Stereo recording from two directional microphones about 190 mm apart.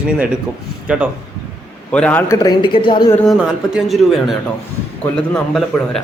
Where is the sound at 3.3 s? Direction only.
Centre (ahead or behind).